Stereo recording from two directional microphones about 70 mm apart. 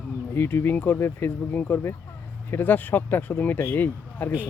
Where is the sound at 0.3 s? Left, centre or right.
Left.